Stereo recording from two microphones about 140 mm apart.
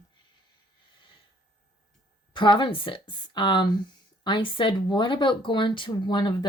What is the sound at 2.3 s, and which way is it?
Speech, 35° left (ahead or behind).